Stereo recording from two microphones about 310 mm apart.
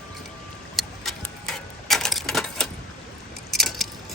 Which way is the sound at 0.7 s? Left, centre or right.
Centre.